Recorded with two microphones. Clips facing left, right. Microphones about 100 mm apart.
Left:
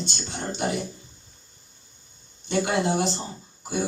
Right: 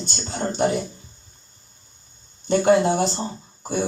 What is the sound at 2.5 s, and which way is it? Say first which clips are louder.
Speech: right 7 dB; 45° right (ahead or behind).